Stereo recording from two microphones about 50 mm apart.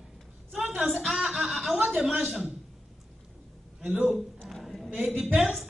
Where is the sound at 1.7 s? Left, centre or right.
Centre.